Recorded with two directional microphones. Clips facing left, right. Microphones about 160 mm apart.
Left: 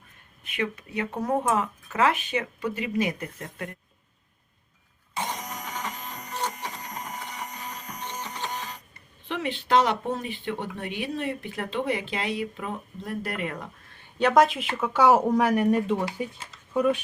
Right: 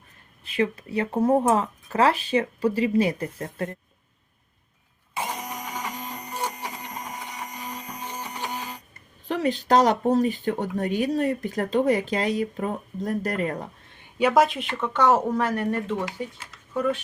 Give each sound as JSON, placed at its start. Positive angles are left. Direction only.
{"t": 0.4, "sound": "speech", "side_deg": -30}
{"t": 5.1, "sound": "a sound", "side_deg": -5}
{"t": 5.5, "sound": "printer", "side_deg": -10}
{"t": 9.2, "sound": "speech", "side_deg": -40}
{"t": 14.2, "sound": "speech", "side_deg": -5}